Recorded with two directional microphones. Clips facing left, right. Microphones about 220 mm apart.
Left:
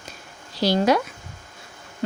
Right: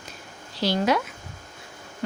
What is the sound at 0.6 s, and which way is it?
Speech, 40° left (ahead or behind).